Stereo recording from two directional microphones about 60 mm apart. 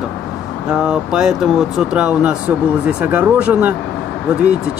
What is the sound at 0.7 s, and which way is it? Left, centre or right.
Speech, centre.